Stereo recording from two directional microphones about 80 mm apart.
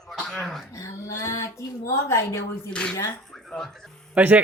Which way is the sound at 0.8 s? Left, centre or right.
Left.